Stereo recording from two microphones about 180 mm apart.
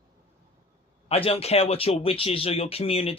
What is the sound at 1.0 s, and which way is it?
Speech, 35° left (ahead or behind).